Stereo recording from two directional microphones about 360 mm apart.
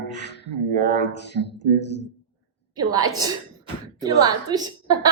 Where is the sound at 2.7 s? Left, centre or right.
Centre.